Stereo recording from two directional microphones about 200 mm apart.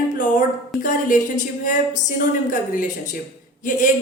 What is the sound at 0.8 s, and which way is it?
A woman's voice, 40° left (ahead or behind).